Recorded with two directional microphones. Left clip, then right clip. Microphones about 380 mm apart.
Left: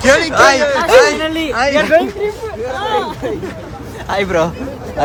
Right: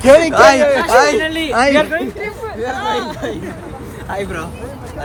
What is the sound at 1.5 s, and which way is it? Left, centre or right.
Speech, centre.